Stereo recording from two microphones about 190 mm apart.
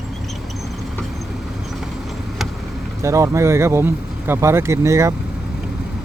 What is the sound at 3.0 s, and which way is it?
Speech, 15° right (ahead or behind).